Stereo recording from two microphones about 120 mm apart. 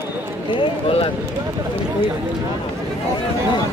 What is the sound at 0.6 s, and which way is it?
Speech, 50° left (ahead or behind).